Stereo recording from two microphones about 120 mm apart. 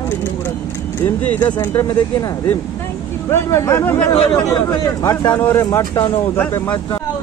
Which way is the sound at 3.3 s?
25° left (ahead or behind).